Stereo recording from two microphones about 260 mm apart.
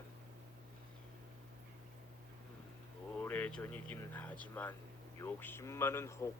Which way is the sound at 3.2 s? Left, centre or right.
Centre.